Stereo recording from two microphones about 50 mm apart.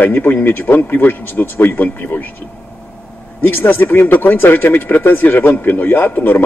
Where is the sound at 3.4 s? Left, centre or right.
Left.